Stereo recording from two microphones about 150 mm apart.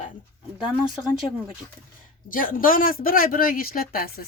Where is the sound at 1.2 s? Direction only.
30° left (ahead or behind).